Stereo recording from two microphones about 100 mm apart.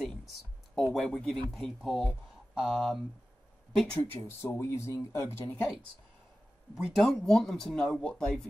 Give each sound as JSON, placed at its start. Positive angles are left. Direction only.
{"t": 0.0, "sound": "a sound", "side_deg": 0}
{"t": 0.9, "sound": "speech", "side_deg": 5}
{"t": 4.4, "sound": "speech", "side_deg": 25}
{"t": 5.5, "sound": "speech", "side_deg": 10}
{"t": 7.0, "sound": "speech", "side_deg": 5}